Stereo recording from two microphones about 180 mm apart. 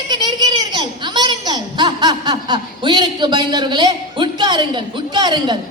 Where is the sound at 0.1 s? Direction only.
25° right (ahead or behind).